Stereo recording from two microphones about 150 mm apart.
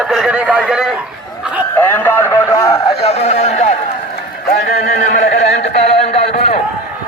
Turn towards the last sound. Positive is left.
turn(degrees=40)  # may be behind; listen again after turning